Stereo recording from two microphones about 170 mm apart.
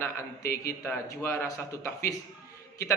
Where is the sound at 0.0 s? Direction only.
15° left (ahead or behind).